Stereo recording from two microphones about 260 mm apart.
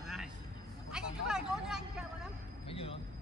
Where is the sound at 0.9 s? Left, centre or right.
Centre.